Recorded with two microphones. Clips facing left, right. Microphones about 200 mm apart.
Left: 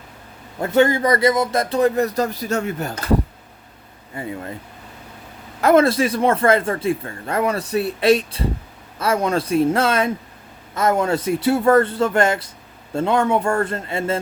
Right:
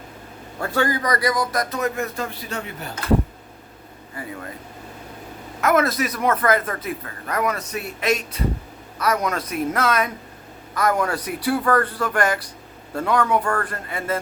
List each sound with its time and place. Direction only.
0.6 s speech: 20° left (ahead or behind); by 3.0 s 45° left (ahead or behind)
4.2 s speech: 25° left (ahead or behind)
5.5 s speech: 30° left (ahead or behind)